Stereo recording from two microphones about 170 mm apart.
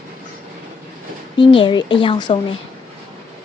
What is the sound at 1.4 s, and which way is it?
A woman's voice, 30° left (ahead or behind).